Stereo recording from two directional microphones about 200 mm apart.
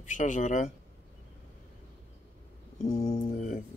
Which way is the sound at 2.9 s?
20° left (ahead or behind).